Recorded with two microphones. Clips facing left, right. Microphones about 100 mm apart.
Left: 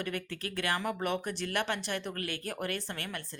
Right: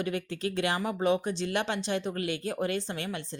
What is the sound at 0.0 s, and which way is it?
Speech, 20° right (ahead or behind).